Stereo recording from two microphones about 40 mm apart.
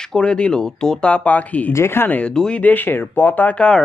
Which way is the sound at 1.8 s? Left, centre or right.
Left.